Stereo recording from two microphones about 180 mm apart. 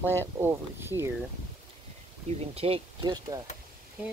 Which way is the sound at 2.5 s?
35° right (ahead or behind).